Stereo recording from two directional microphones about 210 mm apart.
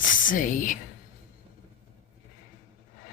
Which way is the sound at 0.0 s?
40° left (ahead or behind).